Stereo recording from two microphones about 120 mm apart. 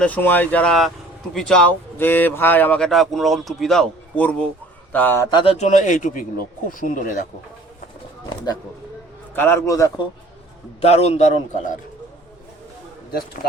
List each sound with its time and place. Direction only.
0.0 s speech: 15° left (ahead or behind)
2.0 s speech: 15° left (ahead or behind)
4.1 s speech: 10° left (ahead or behind)
5.3 s a man's voice: 45° left (ahead or behind)
5.5 s a man's voice: 90° left
9.3 s a man's voice: 20° left (ahead or behind)
10.8 s a man's voice: 60° left (ahead or behind); by 11.8 s 80° left